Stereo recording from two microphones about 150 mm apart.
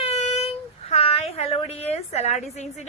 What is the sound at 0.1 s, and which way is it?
A woman's voice, 45° left (ahead or behind).